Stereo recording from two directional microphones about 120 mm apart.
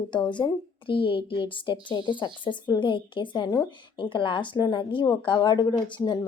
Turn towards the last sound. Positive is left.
turn(degrees=40)  # may be behind; listen again after turning